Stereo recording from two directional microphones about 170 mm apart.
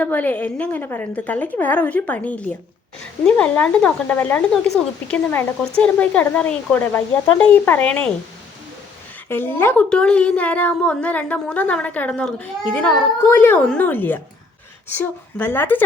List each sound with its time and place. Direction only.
0.0 s speech: 10° left (ahead or behind)
9.3 s speech: 10° left (ahead or behind)